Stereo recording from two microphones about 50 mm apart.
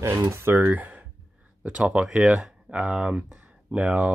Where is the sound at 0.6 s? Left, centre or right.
Right.